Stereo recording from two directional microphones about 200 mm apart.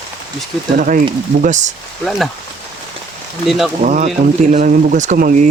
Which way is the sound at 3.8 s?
40° right (ahead or behind).